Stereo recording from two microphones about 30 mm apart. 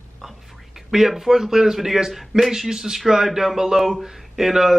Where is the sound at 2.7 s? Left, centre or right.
Centre.